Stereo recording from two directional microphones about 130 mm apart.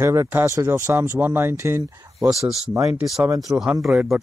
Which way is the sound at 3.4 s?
Centre (ahead or behind).